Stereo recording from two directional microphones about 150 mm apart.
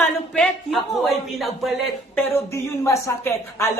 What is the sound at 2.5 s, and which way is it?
Speech, 20° left (ahead or behind).